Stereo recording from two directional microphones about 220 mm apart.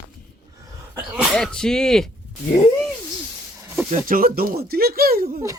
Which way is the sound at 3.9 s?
40° right (ahead or behind).